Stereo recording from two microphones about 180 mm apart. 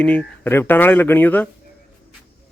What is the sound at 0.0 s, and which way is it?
Speech, 5° left (ahead or behind).